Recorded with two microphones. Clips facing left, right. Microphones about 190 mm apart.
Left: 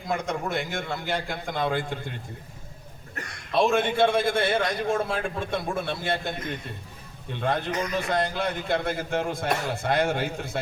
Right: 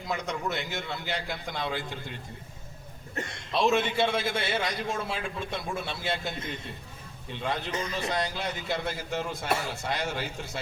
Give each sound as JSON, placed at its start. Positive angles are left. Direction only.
{"t": 0.1, "sound": "a man's voice", "side_deg": 50}
{"t": 3.2, "sound": "a man's voice", "side_deg": -25}
{"t": 3.5, "sound": "a man's voice", "side_deg": 55}
{"t": 7.3, "sound": "a man's voice", "side_deg": 55}